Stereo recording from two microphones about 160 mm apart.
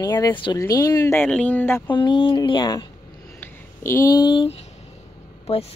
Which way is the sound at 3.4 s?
15° left (ahead or behind).